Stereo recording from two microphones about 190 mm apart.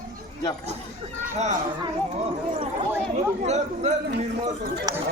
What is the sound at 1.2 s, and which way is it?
Speech, 40° right (ahead or behind).